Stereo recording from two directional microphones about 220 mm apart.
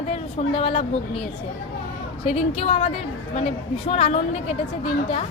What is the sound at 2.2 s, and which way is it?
A woman's voice, 30° left (ahead or behind).